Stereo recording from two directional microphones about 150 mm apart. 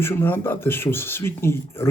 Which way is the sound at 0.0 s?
15° left (ahead or behind).